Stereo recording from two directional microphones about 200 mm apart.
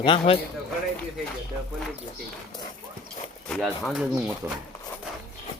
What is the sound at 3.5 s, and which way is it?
Speech, centre (ahead or behind).